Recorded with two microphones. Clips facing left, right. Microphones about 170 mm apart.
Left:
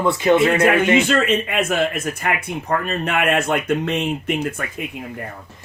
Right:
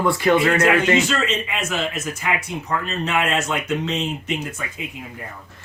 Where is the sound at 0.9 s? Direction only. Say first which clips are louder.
Left 4 dB; 55° left (ahead or behind).